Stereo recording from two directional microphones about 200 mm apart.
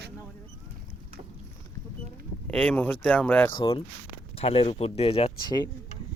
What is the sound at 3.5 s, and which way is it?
Speech, 25° left (ahead or behind).